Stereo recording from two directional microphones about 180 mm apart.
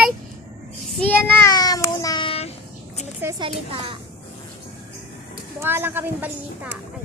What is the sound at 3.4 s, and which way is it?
Speech, 30° right (ahead or behind).